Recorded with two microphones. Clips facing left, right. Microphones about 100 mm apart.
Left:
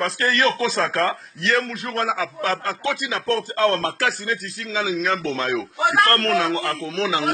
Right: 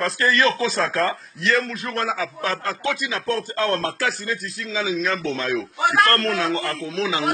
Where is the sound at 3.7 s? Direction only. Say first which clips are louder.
Left 3 dB; centre (ahead or behind).